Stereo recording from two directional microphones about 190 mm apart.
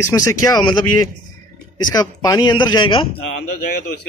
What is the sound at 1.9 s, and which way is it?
A man's voice, 20° left (ahead or behind).